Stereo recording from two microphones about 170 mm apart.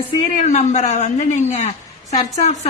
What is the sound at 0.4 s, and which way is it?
A woman's voice, 40° left (ahead or behind).